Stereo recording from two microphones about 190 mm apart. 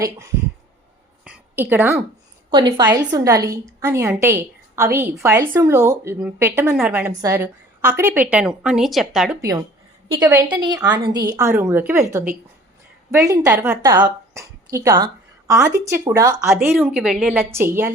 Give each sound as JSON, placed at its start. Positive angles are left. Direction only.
{"t": 1.2, "sound": "a sound", "side_deg": -10}
{"t": 2.5, "sound": "a woman's voice", "side_deg": -25}
{"t": 9.4, "sound": "a woman's voice", "side_deg": -15}
{"t": 16.6, "sound": "a woman's voice", "side_deg": -5}